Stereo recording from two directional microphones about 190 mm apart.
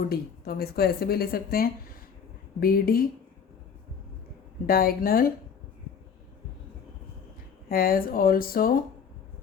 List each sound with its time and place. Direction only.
0.1 s a woman's voice: 55° left (ahead or behind)
4.6 s a woman's voice: 50° left (ahead or behind)
7.7 s a woman's voice: 50° left (ahead or behind)